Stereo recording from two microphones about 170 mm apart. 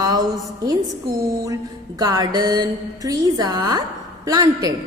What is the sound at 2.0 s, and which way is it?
A woman's voice, 25° right (ahead or behind).